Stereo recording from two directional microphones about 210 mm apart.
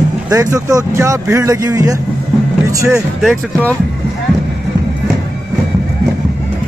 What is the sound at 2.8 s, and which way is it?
Speech, centre (ahead or behind).